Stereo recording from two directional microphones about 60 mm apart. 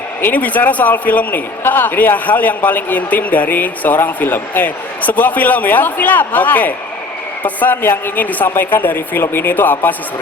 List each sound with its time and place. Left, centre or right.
0.2 s a man's voice: left